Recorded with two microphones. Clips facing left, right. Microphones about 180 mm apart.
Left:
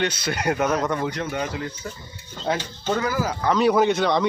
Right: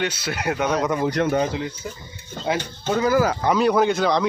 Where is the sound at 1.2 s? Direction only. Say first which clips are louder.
Right 8 dB; 65° right (ahead or behind).